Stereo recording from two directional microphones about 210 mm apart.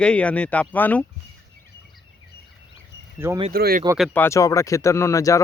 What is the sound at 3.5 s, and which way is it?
Speech, 45° right (ahead or behind).